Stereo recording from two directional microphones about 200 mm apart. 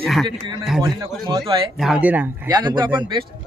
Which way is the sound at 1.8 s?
5° right (ahead or behind).